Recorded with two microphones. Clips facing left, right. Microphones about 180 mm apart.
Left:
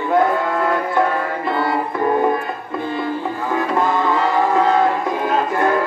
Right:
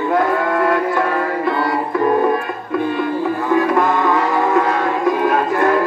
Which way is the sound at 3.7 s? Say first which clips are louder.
Right 2 dB; 25° left (ahead or behind).